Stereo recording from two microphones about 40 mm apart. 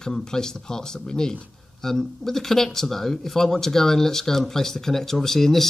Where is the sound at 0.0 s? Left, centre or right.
Centre.